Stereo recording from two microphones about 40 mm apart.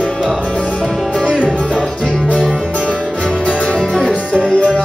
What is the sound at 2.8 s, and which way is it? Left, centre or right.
Music, left.